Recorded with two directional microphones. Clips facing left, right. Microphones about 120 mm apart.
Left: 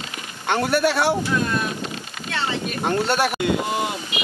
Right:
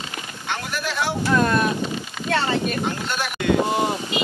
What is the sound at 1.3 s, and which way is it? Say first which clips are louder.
Speech: right 4 dB; 60° right (ahead or behind).